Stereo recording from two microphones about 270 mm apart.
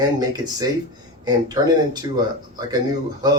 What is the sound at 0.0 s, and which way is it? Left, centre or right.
Speech, centre.